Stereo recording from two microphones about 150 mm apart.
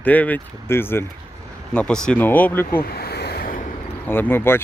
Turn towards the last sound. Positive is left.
turn(degrees=15)  # may be behind; listen again after turning